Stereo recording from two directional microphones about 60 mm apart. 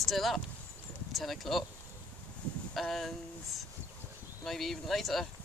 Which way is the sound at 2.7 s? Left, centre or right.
Centre.